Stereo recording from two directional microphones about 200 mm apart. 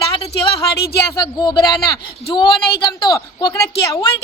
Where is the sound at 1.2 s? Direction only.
20° left (ahead or behind).